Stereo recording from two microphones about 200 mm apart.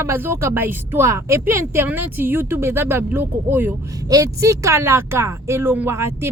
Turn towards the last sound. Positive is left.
turn(degrees=-10)  # may be behind; listen again after turning